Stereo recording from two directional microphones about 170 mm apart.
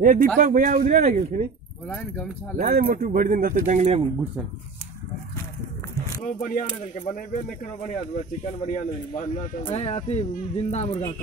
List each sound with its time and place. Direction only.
0.0 s speech: 55° right (ahead or behind)
1.9 s speech: 15° left (ahead or behind)
2.5 s speech: 60° right (ahead or behind); by 4.0 s 45° right (ahead or behind)
6.2 s speech: 50° left (ahead or behind)
9.6 s speech: 35° left (ahead or behind)